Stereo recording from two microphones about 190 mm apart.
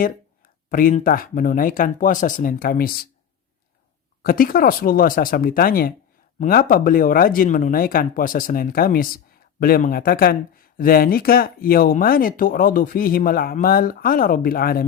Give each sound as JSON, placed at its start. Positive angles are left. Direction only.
{"t": 0.7, "sound": "speech", "side_deg": 45}
{"t": 4.2, "sound": "speech", "side_deg": 50}